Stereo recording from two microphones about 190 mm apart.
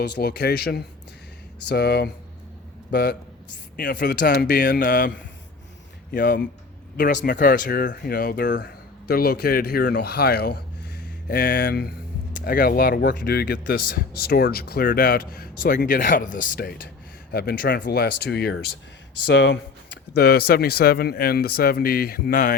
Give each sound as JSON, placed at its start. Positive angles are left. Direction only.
{"t": 0.2, "sound": "speech", "side_deg": 55}
{"t": 6.1, "sound": "speech", "side_deg": 45}
{"t": 17.3, "sound": "speech", "side_deg": 50}
{"t": 19.2, "sound": "speech", "side_deg": 70}